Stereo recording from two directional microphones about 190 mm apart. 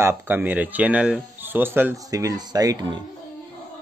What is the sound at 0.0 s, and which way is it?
Speech, 10° right (ahead or behind).